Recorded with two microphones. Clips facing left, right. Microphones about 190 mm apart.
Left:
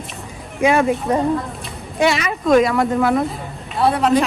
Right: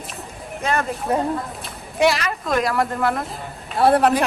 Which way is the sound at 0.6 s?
10° left (ahead or behind).